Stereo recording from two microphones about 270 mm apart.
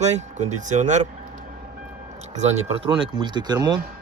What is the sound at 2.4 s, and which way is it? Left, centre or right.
Speech, right.